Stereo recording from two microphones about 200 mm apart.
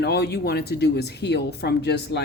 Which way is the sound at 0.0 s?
55° left (ahead or behind).